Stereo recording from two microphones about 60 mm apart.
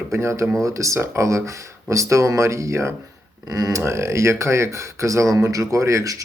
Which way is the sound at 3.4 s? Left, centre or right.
Right.